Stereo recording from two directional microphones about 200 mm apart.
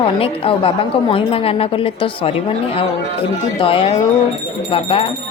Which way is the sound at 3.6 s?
25° left (ahead or behind).